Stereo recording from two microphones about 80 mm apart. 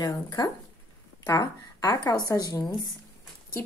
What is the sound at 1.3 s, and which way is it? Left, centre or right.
A woman's voice, left.